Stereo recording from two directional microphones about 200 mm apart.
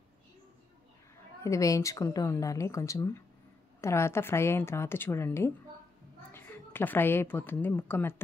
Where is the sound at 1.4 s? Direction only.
15° left (ahead or behind).